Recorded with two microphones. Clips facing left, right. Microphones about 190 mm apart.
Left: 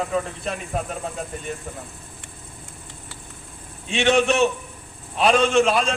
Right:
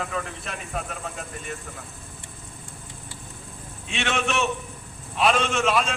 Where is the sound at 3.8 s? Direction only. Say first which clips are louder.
Left 8 dB; 35° left (ahead or behind).